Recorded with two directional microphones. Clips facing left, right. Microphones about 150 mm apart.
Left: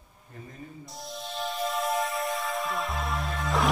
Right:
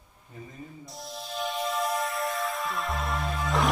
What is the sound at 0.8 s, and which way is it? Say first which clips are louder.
Music: left 2 dB; centre (ahead or behind).